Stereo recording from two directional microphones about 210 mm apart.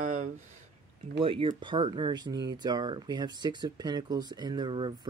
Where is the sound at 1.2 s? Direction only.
25° right (ahead or behind).